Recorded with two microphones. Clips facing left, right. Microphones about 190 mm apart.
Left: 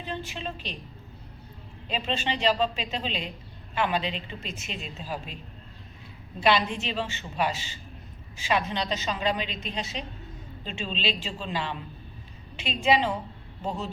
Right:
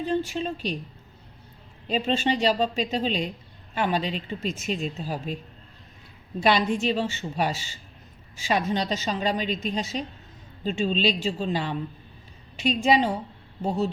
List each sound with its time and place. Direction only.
0.1 s a woman's voice: 45° right (ahead or behind)
1.9 s a woman's voice: 45° right (ahead or behind)
6.4 s a woman's voice: 45° right (ahead or behind)